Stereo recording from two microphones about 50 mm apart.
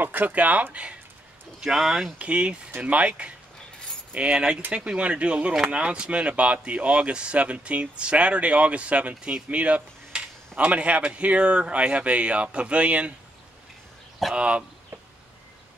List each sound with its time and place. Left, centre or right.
0.0 s speech: right
1.7 s speech: centre
2.1 s speech: right
14.3 s speech: right